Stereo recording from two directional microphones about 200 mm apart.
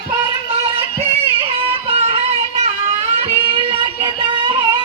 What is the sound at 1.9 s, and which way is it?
Music, 30° right (ahead or behind).